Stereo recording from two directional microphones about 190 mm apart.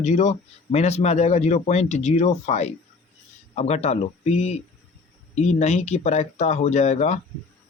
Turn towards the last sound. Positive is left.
turn(degrees=35)  # may be behind; listen again after turning